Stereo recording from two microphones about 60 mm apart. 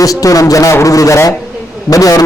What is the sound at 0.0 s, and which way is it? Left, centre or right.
A man's voice, left.